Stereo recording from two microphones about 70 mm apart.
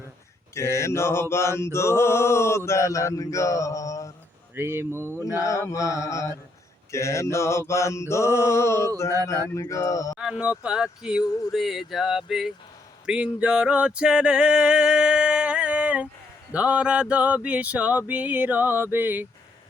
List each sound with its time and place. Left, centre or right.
0.5 s mantra: left
4.5 s speech: right
5.2 s mantra: left
10.2 s a sound: centre
10.6 s speech: centre
13.1 s a sound: centre